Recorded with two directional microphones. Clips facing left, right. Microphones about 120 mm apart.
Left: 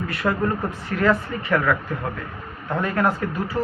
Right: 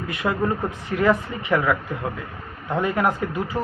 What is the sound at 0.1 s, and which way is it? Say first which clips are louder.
Speech: right 1 dB; 15° right (ahead or behind).